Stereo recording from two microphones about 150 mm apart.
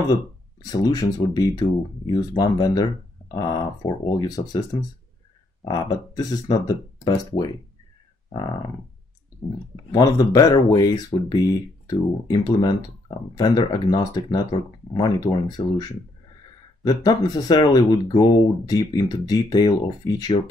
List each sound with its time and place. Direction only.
0.7 s speech: 25° left (ahead or behind)
8.3 s a sound: 30° left (ahead or behind)
9.8 s speech: 25° left (ahead or behind)